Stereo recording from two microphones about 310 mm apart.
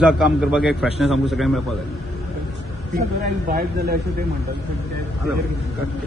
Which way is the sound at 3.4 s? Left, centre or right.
Right.